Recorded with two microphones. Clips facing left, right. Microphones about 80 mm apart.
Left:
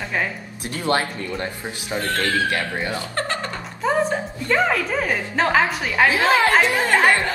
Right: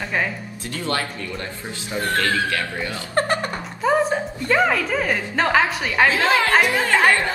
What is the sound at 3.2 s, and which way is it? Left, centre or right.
Music, right.